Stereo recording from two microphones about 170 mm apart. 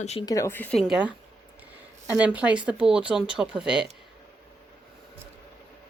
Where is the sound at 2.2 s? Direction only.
10° right (ahead or behind).